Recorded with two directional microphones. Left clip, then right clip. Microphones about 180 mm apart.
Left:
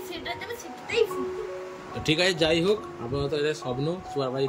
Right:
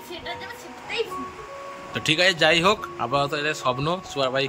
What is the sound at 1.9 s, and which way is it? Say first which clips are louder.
A man's voice: right 4 dB; 5° left (ahead or behind).